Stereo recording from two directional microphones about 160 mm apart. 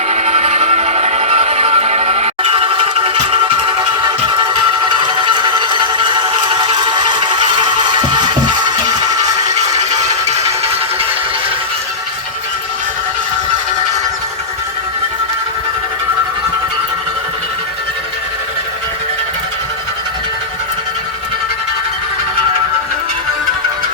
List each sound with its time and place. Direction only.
0.1 s music: 45° right (ahead or behind)
4.3 s a sound: 30° right (ahead or behind)
10.1 s music: 45° right (ahead or behind)